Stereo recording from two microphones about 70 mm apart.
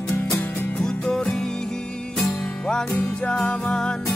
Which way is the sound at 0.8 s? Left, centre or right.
Centre.